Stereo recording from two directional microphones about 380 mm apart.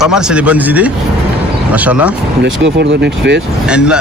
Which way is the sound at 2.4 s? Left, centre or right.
Right.